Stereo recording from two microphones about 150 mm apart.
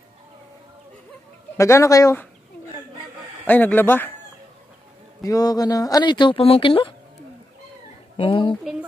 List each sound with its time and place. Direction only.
1.6 s speech: 20° left (ahead or behind)
3.4 s speech: 10° left (ahead or behind)
5.2 s speech: 25° left (ahead or behind)
8.2 s a woman's voice: 35° left (ahead or behind)